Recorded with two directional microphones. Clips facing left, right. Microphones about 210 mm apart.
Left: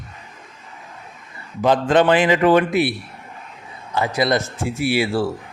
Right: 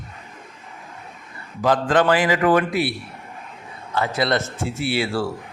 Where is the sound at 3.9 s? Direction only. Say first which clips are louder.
Left 2 dB; 15° left (ahead or behind).